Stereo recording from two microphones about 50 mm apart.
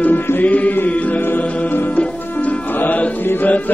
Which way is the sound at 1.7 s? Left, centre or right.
Left.